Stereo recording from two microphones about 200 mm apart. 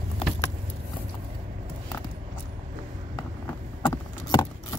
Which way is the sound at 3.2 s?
15° left (ahead or behind).